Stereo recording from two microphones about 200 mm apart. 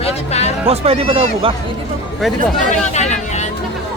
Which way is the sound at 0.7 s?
30° right (ahead or behind).